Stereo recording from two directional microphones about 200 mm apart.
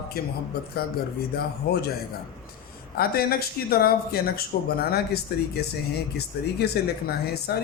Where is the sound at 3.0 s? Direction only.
50° left (ahead or behind).